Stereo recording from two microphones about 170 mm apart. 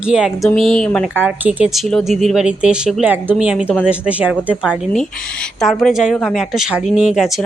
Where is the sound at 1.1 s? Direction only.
10° right (ahead or behind).